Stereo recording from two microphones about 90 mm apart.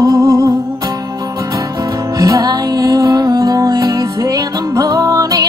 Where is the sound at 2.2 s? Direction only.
40° right (ahead or behind).